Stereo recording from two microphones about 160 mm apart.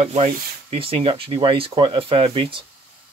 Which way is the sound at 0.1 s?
40° right (ahead or behind).